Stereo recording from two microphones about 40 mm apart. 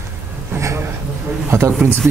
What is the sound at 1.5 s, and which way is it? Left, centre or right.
Speech, right.